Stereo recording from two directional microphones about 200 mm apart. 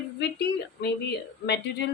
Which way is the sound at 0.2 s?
60° left (ahead or behind).